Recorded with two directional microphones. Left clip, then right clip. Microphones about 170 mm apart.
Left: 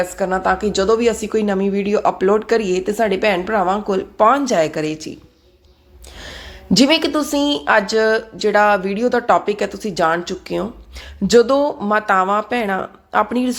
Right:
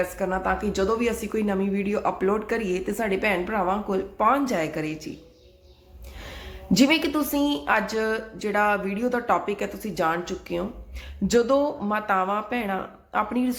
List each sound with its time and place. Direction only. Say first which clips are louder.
0.2 s a woman's voice: left 8 dB; 25° left (ahead or behind)
6.1 s a woman's voice: left 6 dB; 25° left (ahead or behind)